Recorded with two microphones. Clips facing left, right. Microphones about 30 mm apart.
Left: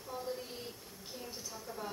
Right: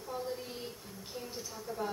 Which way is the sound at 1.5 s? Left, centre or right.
Centre.